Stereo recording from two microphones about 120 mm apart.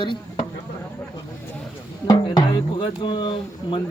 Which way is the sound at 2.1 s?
35° left (ahead or behind).